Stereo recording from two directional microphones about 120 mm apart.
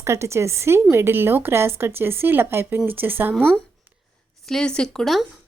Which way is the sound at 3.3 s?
5° left (ahead or behind).